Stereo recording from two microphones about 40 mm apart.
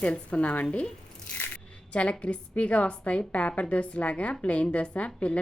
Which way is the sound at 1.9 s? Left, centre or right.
Left.